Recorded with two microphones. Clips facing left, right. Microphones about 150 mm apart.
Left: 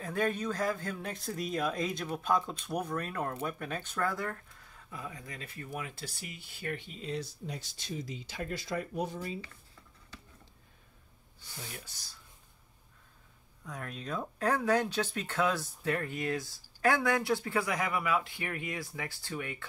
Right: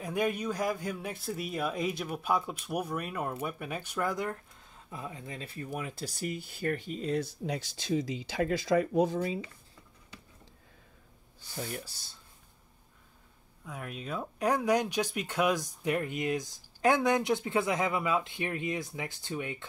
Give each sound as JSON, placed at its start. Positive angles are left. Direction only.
{"t": 0.0, "sound": "speech", "side_deg": -15}
{"t": 7.4, "sound": "speech", "side_deg": -90}
{"t": 11.8, "sound": "speech", "side_deg": -30}
{"t": 13.7, "sound": "speech", "side_deg": -5}